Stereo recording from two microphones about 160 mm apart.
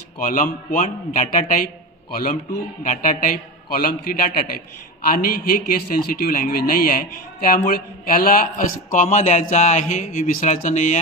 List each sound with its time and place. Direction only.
0.2 s a man's voice: 55° left (ahead or behind)
2.8 s a man's voice: 55° left (ahead or behind)